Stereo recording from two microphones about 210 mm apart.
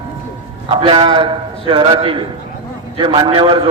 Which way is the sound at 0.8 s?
25° right (ahead or behind).